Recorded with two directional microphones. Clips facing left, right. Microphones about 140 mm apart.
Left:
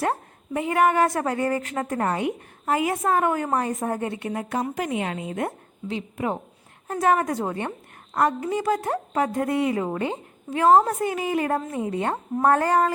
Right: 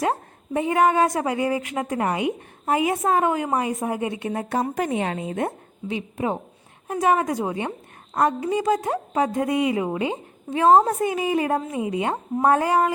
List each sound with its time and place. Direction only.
0.5 s a woman's voice: 20° right (ahead or behind)